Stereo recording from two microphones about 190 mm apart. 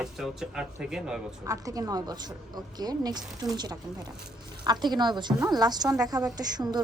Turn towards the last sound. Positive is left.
turn(degrees=-20)  # may be behind; listen again after turning